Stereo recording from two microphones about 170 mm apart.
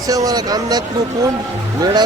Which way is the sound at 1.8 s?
25° right (ahead or behind).